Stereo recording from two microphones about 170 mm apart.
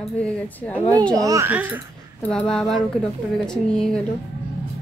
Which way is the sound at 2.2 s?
5° left (ahead or behind).